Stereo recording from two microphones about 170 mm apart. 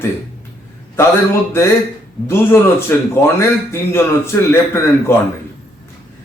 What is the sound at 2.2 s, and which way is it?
A man's voice, 15° left (ahead or behind).